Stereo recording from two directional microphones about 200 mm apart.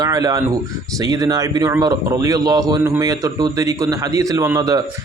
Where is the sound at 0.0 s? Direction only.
20° right (ahead or behind).